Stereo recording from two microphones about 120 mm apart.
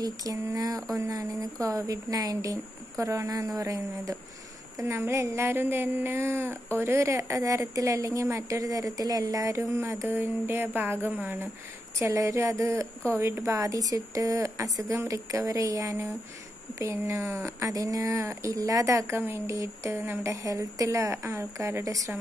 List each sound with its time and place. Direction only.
0.0 s a sound: 30° right (ahead or behind)
1.1 s a woman's voice: 30° right (ahead or behind)
12.0 s a woman's voice: 25° right (ahead or behind)
19.9 s speech: 15° right (ahead or behind)
20.4 s a woman's voice: 30° right (ahead or behind)